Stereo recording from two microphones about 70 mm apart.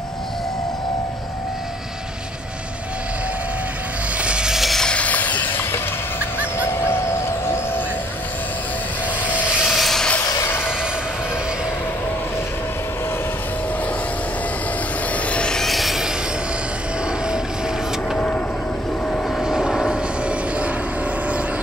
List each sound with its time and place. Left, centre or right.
4.2 s a sound: centre
4.8 s a sound: centre
6.8 s music: left
9.7 s vehicle: centre
10.3 s vehicle: left
15.2 s rub: centre
18.1 s vehicle: centre
19.4 s vehicle: centre
19.9 s vehicle: centre